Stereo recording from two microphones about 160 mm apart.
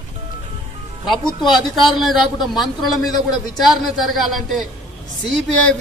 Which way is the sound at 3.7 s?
Centre (ahead or behind).